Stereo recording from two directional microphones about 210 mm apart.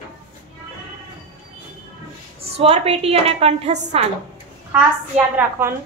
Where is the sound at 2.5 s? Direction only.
30° right (ahead or behind).